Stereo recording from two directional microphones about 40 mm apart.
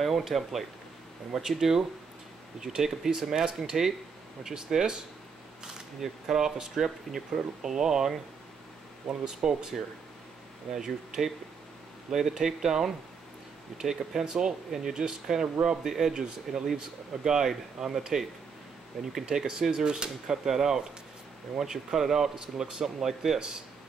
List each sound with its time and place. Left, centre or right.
0.0 s speech: centre
5.9 s speech: centre
9.2 s speech: centre
16.1 s speech: centre